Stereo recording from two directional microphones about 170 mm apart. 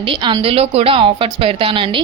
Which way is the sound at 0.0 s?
30° right (ahead or behind).